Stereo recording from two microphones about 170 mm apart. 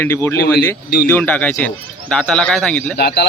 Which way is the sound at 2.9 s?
70° left (ahead or behind).